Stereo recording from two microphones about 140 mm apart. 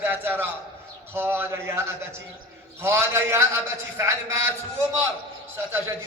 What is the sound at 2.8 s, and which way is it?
A man's voice, 20° right (ahead or behind).